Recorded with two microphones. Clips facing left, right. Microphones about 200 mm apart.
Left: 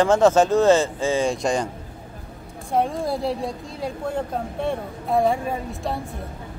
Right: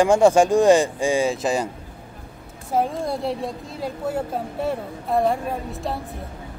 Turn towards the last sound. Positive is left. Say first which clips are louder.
# even
turn(degrees=0)  # may be behind; listen again after turning